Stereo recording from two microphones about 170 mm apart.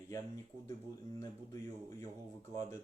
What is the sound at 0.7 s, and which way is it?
Speech, 20° left (ahead or behind).